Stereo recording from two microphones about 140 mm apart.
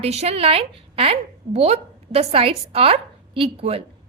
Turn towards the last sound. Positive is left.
turn(degrees=-45)  # may be behind; listen again after turning